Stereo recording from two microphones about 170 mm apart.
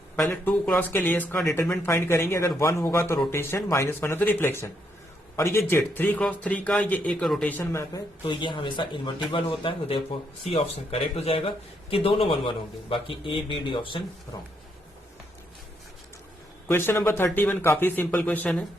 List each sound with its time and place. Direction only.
0.2 s speech: 10° left (ahead or behind)
8.2 s a man's voice: 30° left (ahead or behind)
16.6 s speech: 15° left (ahead or behind)